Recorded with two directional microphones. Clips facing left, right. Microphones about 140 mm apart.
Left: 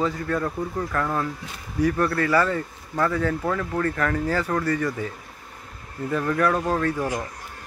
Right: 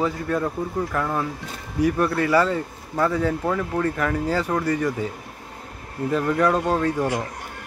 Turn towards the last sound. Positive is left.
turn(degrees=-15)  # may be behind; listen again after turning